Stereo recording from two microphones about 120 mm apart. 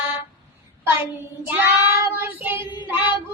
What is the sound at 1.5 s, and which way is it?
Child singing, 20° right (ahead or behind).